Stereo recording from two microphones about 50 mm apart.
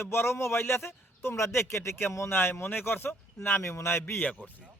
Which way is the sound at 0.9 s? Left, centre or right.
Left.